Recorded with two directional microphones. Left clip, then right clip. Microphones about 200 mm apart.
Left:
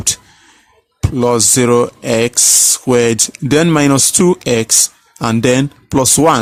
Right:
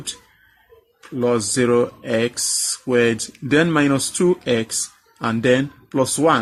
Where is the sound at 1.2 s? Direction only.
45° left (ahead or behind).